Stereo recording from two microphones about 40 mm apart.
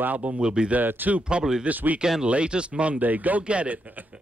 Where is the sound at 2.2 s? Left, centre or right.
Right.